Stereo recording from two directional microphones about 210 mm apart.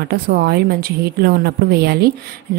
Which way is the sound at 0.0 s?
50° right (ahead or behind).